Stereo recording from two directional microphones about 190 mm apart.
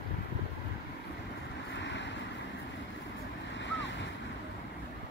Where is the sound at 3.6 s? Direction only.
75° left (ahead or behind).